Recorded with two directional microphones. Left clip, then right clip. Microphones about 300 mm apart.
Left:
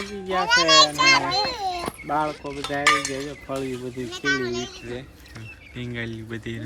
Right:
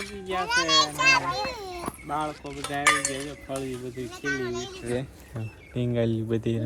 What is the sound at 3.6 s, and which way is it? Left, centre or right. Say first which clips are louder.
Speech: left 4 dB; left.